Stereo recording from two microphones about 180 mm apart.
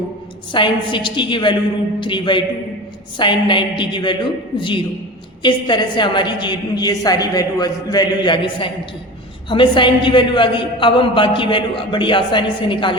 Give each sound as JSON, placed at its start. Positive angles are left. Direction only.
{"t": 0.5, "sound": "a man's voice", "side_deg": 25}